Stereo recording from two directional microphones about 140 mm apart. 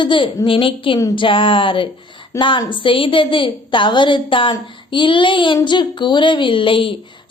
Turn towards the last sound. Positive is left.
turn(degrees=40)  # may be behind; listen again after turning